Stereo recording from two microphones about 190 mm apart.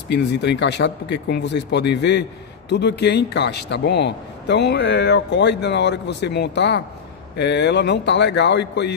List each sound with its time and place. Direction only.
0.1 s a man's voice: 65° left (ahead or behind)